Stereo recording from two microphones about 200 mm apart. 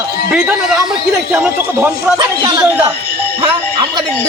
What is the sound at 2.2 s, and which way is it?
Speech, 20° right (ahead or behind).